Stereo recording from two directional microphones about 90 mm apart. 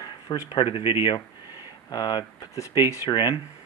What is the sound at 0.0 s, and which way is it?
Speech, 60° left (ahead or behind).